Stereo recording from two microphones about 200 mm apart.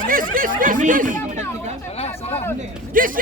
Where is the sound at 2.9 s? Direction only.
45° right (ahead or behind).